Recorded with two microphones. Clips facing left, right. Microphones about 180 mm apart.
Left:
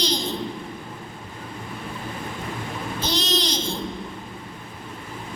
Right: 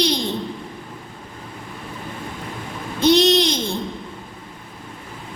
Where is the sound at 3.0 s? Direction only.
65° right (ahead or behind).